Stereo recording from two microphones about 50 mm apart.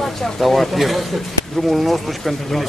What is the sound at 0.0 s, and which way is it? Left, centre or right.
Speech, centre.